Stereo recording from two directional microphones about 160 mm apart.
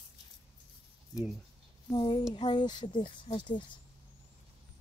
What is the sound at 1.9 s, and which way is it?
Speech, 30° left (ahead or behind).